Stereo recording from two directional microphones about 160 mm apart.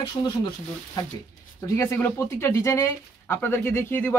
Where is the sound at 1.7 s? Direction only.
15° left (ahead or behind).